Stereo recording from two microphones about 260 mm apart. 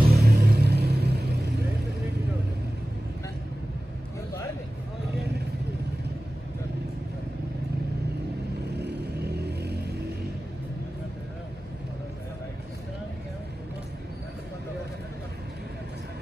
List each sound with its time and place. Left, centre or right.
0.1 s vehicle: right
8.7 s vehicle: right